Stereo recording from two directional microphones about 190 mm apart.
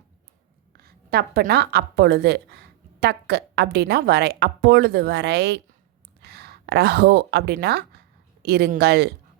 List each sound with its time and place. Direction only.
0.8 s a woman's voice: 55° right (ahead or behind)